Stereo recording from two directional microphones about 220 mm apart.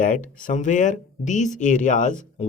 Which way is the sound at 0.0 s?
35° left (ahead or behind).